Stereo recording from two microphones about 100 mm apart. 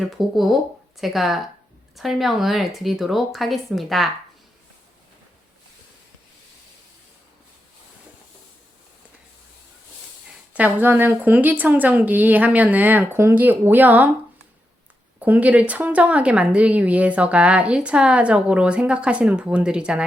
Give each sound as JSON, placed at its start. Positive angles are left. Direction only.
{"t": 0.0, "sound": "speech", "side_deg": 0}
{"t": 10.5, "sound": "a woman's voice", "side_deg": -15}
{"t": 15.2, "sound": "a woman's voice", "side_deg": -15}